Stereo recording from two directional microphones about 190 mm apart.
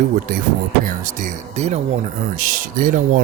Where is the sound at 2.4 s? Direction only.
45° right (ahead or behind).